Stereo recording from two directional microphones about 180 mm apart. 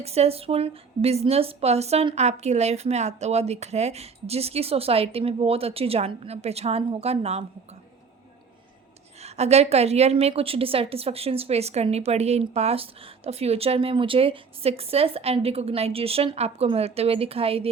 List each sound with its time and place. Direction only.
0.0 s a woman's voice: 35° right (ahead or behind)
9.2 s a woman's voice: 35° right (ahead or behind)